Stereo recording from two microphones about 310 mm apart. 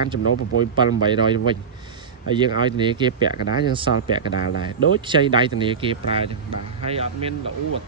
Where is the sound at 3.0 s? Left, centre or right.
Centre.